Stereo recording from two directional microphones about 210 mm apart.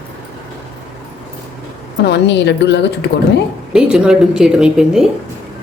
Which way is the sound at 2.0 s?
55° left (ahead or behind).